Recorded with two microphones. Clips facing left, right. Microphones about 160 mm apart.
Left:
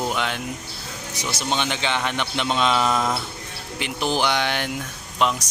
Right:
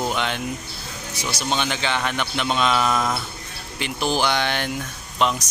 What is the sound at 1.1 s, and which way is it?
A man's voice, 20° left (ahead or behind).